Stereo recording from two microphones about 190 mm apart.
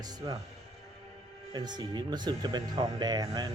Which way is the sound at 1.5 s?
20° right (ahead or behind).